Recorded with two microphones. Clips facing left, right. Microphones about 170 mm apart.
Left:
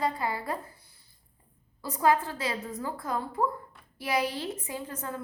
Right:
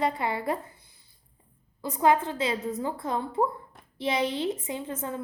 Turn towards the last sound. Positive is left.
turn(degrees=-20)  # may be behind; listen again after turning